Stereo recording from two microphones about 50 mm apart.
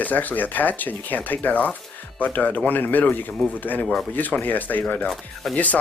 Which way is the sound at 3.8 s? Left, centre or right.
Centre.